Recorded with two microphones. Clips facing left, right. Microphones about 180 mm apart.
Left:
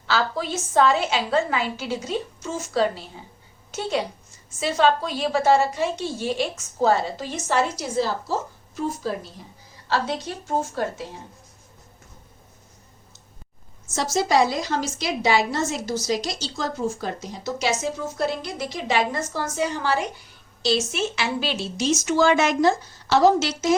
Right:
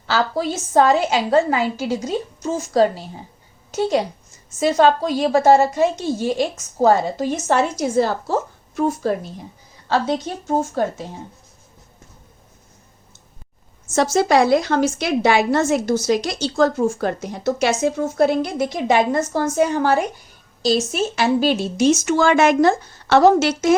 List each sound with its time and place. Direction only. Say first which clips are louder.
0.1 s a woman's voice: right 4 dB; 40° right (ahead or behind); by 9.1 s 60° right (ahead or behind)
13.9 s a woman's voice: right 5 dB; 60° right (ahead or behind)